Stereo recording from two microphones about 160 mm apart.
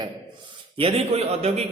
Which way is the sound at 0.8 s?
40° right (ahead or behind).